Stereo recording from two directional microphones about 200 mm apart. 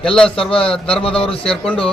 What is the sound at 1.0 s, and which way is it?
Speech, 30° left (ahead or behind).